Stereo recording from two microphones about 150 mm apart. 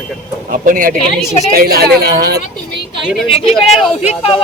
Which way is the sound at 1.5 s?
90° right.